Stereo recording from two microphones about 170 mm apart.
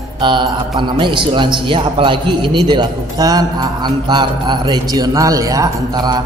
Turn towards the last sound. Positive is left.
turn(degrees=-25)  # may be behind; listen again after turning